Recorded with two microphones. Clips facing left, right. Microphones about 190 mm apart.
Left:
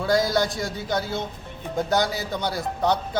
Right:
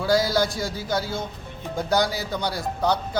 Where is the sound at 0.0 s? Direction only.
Centre (ahead or behind).